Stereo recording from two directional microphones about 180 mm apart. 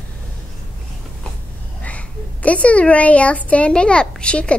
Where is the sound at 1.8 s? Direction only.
5° left (ahead or behind).